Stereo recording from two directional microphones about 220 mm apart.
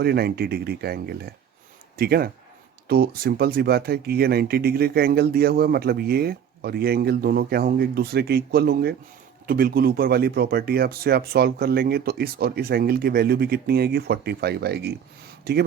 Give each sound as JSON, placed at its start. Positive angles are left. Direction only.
{"t": 0.0, "sound": "speech", "side_deg": -45}